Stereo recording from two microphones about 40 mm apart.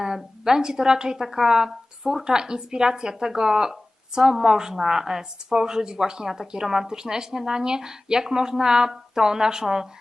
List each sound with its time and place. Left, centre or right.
0.0 s a woman's voice: centre